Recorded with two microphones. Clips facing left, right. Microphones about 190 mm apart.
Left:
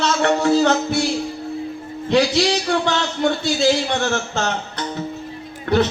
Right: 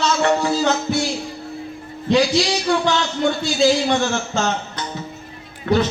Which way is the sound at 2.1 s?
60° left (ahead or behind).